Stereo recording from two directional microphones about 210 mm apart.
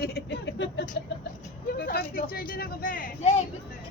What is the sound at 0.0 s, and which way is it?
Speech, 55° left (ahead or behind).